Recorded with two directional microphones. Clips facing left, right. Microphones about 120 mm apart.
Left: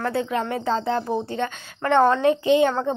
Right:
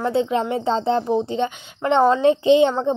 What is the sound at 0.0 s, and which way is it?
A woman's voice, 20° right (ahead or behind).